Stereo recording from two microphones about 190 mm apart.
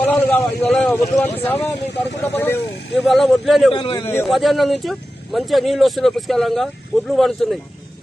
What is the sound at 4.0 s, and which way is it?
Speech, 10° left (ahead or behind).